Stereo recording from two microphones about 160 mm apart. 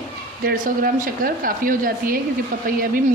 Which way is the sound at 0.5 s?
60° right (ahead or behind).